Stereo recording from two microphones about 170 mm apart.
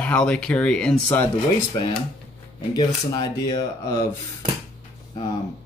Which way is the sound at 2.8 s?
25° left (ahead or behind).